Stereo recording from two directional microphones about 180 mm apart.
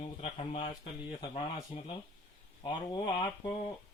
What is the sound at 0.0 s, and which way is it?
Speech, 35° left (ahead or behind).